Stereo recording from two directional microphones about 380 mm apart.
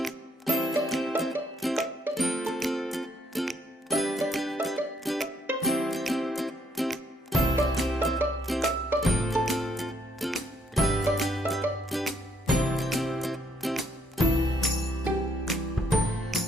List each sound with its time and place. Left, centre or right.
0.0 s music: centre